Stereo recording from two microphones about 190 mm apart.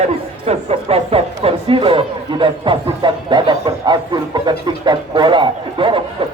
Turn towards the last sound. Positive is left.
turn(degrees=-25)  # may be behind; listen again after turning